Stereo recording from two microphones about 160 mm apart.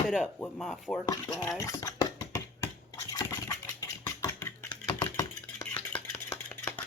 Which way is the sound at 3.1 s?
20° left (ahead or behind).